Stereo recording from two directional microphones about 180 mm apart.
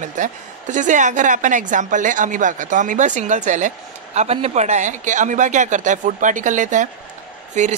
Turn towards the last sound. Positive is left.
turn(degrees=-40)  # may be behind; listen again after turning